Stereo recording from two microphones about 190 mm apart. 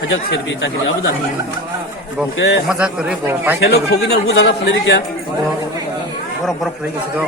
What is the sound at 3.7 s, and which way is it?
Speech, 60° left (ahead or behind).